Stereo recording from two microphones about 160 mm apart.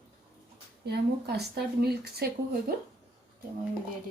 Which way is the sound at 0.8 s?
90° right.